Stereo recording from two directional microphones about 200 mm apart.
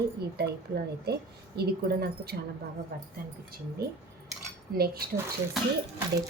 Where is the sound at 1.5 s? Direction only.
50° right (ahead or behind).